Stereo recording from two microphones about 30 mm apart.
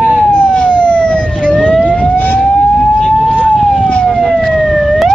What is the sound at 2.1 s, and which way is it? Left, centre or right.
Emergency vehicle, left.